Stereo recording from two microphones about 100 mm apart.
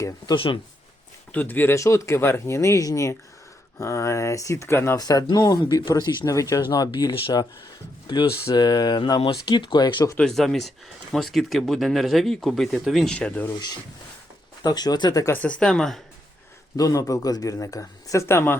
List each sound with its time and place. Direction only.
0.3 s speech: 60° left (ahead or behind)
1.3 s speech: 20° left (ahead or behind)
4.9 s speech: 40° left (ahead or behind)
10.2 s speech: 5° left (ahead or behind)
13.1 s speech: 15° left (ahead or behind)
13.5 s speech: 40° left (ahead or behind)
15.3 s speech: 15° left (ahead or behind)
16.7 s speech: 35° left (ahead or behind)